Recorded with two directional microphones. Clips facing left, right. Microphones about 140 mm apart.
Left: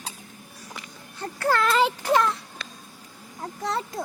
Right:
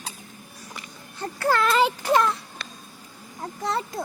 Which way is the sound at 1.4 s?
10° right (ahead or behind).